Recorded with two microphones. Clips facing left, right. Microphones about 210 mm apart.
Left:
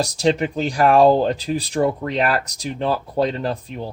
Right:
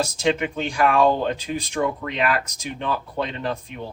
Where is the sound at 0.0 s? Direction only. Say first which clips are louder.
Left 3 dB; 35° left (ahead or behind).